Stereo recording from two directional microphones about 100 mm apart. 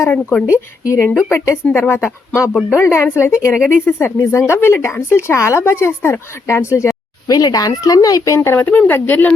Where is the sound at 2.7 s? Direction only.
25° left (ahead or behind).